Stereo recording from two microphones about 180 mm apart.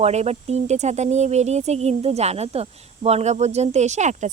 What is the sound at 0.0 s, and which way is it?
Speech, 35° right (ahead or behind).